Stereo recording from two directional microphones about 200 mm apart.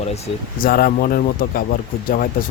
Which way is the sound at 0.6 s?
45° left (ahead or behind).